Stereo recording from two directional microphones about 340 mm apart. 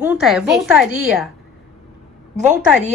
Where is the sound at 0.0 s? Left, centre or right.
Centre.